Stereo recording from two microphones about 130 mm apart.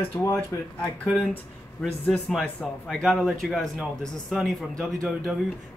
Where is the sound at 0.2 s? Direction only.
15° left (ahead or behind).